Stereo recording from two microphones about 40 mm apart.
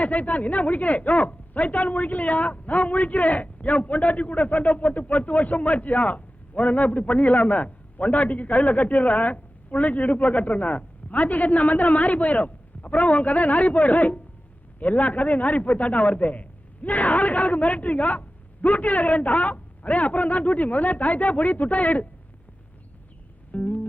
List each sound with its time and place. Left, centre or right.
0.0 s a woman's voice: left
23.5 s music: left